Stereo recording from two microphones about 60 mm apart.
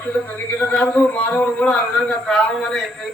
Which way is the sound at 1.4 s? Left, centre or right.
Centre.